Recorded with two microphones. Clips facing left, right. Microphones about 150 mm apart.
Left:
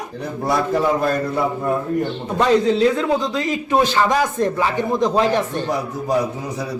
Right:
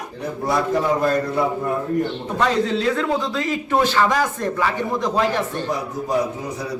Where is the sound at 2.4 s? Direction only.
15° left (ahead or behind).